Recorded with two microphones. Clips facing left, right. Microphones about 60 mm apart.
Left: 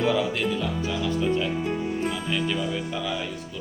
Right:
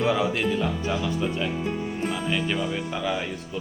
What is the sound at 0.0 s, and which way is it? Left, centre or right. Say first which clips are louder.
Speech: even; centre.